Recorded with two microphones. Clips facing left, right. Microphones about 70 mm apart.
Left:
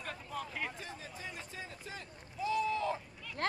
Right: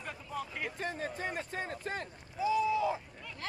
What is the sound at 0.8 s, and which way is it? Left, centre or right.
Speech, right.